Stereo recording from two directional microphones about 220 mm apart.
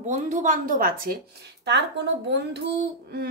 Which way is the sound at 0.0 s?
35° right (ahead or behind).